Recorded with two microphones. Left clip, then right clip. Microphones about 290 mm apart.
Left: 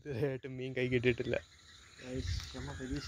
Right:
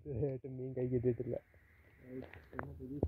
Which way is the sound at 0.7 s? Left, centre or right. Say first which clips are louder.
Left 4 dB; centre.